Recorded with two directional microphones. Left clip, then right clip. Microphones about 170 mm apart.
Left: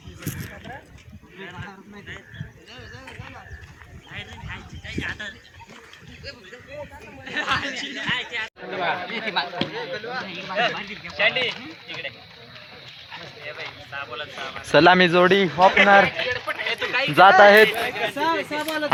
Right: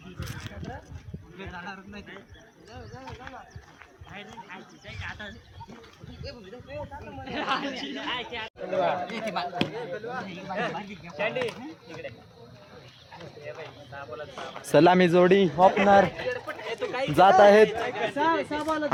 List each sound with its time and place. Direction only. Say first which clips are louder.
4.1 s speech: left 5 dB; 55° right (ahead or behind)
7.3 s speech: left 5 dB; 60° right (ahead or behind); by 9.6 s 90° right
9.7 s speech: left 4 dB; 45° right (ahead or behind)
10.5 s speech: left 8 dB; 75° right (ahead or behind); by 12.0 s 55° right (ahead or behind)
13.9 s speech: left 6 dB; 40° right (ahead or behind)
14.3 s speech: left 3 dB; 10° right (ahead or behind)
15.5 s speech: left 7 dB; centre (ahead or behind)
16.1 s a sound: left 7 dB; 35° right (ahead or behind)
17.2 s speech: left 5 dB; 5° right (ahead or behind)